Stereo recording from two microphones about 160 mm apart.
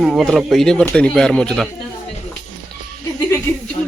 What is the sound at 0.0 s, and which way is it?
Speech, 5° right (ahead or behind).